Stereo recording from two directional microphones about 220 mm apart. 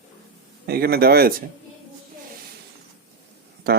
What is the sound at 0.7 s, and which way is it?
Speech, 45° right (ahead or behind).